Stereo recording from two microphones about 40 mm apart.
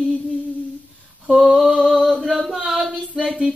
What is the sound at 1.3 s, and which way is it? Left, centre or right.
Female singing, centre.